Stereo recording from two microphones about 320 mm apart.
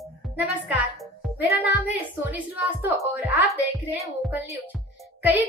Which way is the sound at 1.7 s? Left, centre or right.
Centre.